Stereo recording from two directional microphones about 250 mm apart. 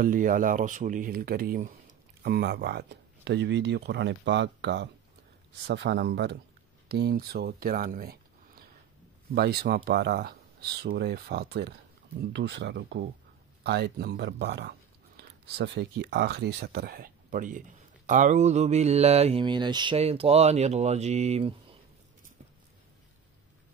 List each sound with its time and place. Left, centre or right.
0.0 s speech: right